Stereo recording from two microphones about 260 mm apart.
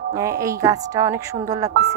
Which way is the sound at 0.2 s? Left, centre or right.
Centre.